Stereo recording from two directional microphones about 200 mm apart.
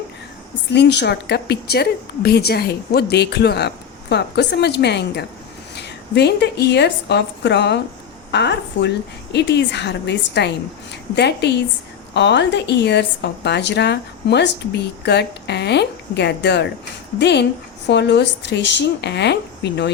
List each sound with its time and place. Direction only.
0.7 s a woman's voice: 60° left (ahead or behind)